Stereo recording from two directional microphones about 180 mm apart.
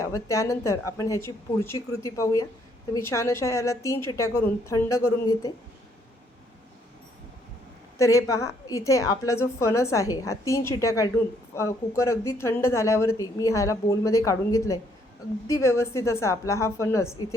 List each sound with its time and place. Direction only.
0.0 s speech: 15° left (ahead or behind)
7.9 s speech: 15° left (ahead or behind)